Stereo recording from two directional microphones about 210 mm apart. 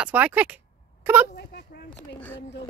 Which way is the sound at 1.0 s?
10° right (ahead or behind).